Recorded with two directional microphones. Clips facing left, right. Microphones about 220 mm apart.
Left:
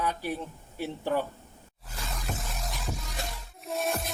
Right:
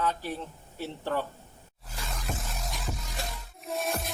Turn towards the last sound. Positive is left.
turn(degrees=0)  # may be behind; listen again after turning